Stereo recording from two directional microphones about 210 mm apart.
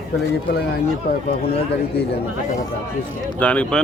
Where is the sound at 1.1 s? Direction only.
50° left (ahead or behind).